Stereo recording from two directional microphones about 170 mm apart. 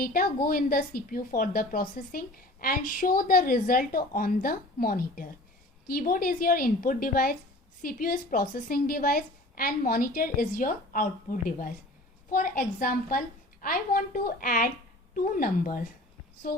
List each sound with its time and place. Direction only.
0.0 s a woman's voice: 60° left (ahead or behind)